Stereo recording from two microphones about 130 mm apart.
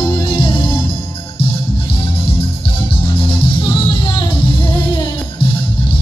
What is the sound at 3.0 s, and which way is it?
Music, 40° left (ahead or behind).